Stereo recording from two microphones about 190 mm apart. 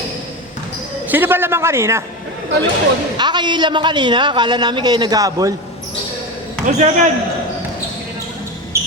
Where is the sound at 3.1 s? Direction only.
25° right (ahead or behind).